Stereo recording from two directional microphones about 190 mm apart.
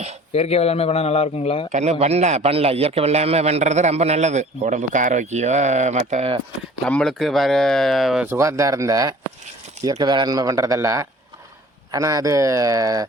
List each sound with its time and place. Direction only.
0.3 s speech: 35° left (ahead or behind)
1.7 s a man's voice: 35° right (ahead or behind)
6.8 s speech: 5° left (ahead or behind); by 13.1 s 20° right (ahead or behind)